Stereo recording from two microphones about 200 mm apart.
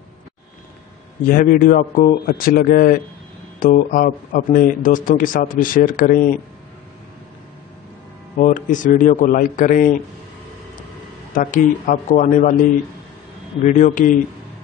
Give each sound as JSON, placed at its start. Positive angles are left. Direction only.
{"t": 1.3, "sound": "speech", "side_deg": 45}
{"t": 8.4, "sound": "speech", "side_deg": 45}
{"t": 11.3, "sound": "speech", "side_deg": 40}
{"t": 13.7, "sound": "speech", "side_deg": 40}